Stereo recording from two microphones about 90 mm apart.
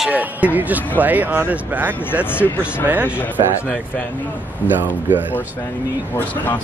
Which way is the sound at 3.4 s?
55° right (ahead or behind).